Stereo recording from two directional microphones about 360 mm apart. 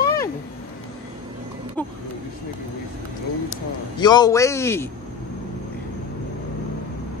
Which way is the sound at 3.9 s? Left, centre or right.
Centre.